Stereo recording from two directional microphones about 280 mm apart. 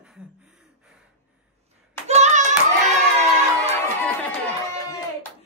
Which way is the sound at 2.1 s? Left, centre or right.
Right.